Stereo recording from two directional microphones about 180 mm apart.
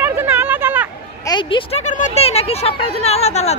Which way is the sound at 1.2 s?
25° left (ahead or behind).